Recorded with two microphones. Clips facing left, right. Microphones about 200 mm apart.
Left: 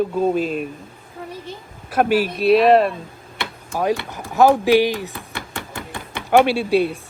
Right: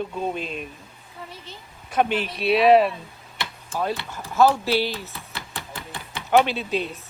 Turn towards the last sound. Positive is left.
turn(degrees=10)  # may be behind; listen again after turning